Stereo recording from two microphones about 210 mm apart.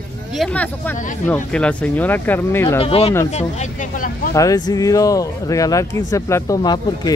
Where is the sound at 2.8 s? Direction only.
30° left (ahead or behind).